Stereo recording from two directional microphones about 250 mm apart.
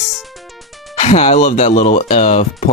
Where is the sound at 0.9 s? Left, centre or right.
Left.